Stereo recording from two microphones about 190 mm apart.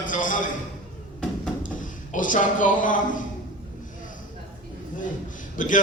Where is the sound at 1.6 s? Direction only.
45° left (ahead or behind).